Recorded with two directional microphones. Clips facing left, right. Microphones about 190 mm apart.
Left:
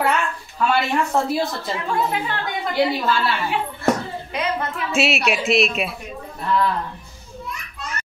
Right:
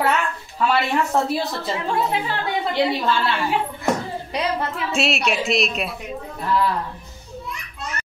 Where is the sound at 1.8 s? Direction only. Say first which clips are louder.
Even; 30° right (ahead or behind).